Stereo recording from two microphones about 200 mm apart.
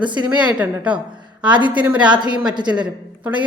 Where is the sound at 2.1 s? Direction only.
20° right (ahead or behind).